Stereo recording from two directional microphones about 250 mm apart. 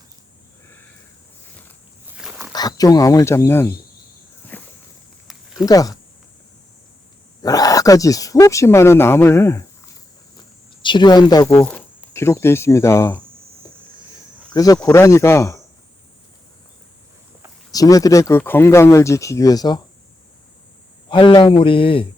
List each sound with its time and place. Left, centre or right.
2.0 s wild animals: centre
2.5 s speech: centre
4.5 s walk: centre
5.6 s speech: centre
7.4 s speech: centre
10.8 s speech: centre
14.5 s speech: centre
17.7 s speech: centre
21.1 s speech: centre